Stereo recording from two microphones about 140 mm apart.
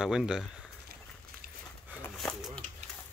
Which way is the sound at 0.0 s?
5° right (ahead or behind).